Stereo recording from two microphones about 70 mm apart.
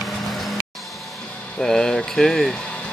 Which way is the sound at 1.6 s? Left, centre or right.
Centre.